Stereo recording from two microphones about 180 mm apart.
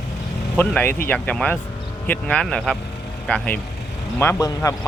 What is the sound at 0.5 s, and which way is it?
Speech, 10° left (ahead or behind).